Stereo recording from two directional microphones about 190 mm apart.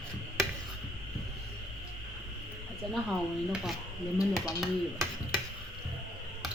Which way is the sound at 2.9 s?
Centre (ahead or behind).